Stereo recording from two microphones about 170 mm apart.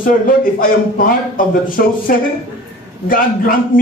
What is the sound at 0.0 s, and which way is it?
Speech, 55° left (ahead or behind).